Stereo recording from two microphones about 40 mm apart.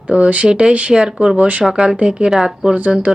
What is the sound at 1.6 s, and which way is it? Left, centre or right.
Speech, centre.